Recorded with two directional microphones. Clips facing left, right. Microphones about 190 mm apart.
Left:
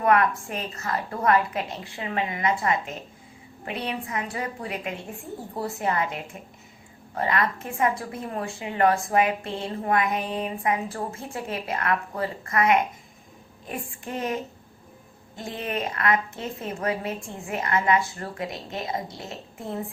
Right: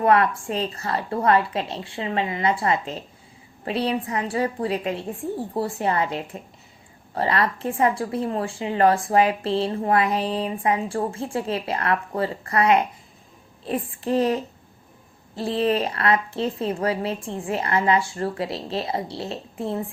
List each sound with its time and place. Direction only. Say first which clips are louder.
0.0 s a woman's voice: right 2 dB; 30° right (ahead or behind)
15.4 s a woman's voice: right 8 dB; 30° right (ahead or behind)